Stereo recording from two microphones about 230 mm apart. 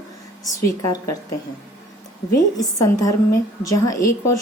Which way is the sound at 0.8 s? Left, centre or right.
Centre.